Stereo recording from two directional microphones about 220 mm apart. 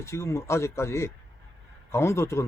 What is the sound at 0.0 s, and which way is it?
Speech, 15° left (ahead or behind).